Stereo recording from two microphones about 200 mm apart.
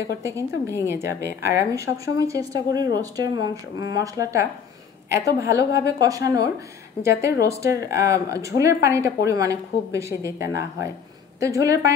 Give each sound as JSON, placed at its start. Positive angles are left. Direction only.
{"t": 0.2, "sound": "speech", "side_deg": -15}